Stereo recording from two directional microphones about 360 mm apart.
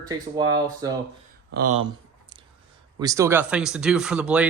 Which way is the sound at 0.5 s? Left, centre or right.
Centre.